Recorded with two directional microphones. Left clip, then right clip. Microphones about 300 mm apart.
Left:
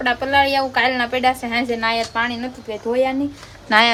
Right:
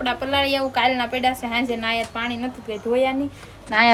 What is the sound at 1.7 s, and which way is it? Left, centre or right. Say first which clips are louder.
Speech: left 4 dB; centre.